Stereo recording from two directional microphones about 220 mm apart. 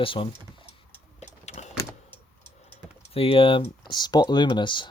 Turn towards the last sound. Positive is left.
turn(degrees=20)  # may be behind; listen again after turning